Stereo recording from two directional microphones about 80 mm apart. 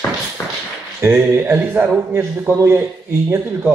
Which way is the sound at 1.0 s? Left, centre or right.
Right.